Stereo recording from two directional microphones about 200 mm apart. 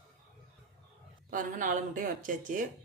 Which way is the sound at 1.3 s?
40° right (ahead or behind).